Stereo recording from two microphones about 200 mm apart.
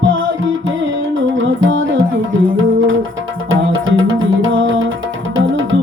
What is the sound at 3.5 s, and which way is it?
Music, 70° right (ahead or behind).